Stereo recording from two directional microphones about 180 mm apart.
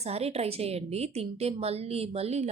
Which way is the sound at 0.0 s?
35° right (ahead or behind).